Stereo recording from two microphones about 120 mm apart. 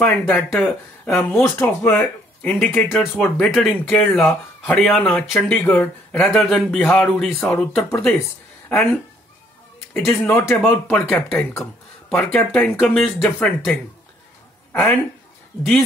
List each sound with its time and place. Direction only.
0.4 s speech: 10° left (ahead or behind)
1.4 s speech: 20° left (ahead or behind)
5.5 s speech: 15° left (ahead or behind)
7.3 s speech: 15° left (ahead or behind)
14.7 s speech: 10° left (ahead or behind)